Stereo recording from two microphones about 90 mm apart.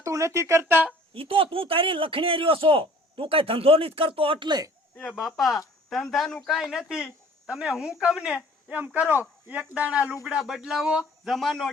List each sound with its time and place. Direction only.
0.0 s speech: 35° right (ahead or behind)
1.1 s a man's voice: 90° right; by 4.6 s 60° right (ahead or behind)
5.0 s speech: centre (ahead or behind)
10.2 s speech: centre (ahead or behind)
11.3 s speech: 5° left (ahead or behind)